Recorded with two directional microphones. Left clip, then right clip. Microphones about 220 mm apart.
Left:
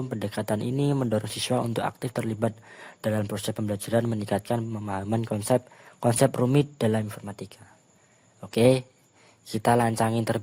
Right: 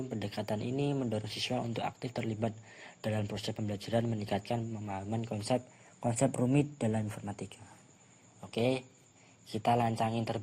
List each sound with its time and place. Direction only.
0.1 s speech: 40° left (ahead or behind)
8.4 s speech: 45° left (ahead or behind)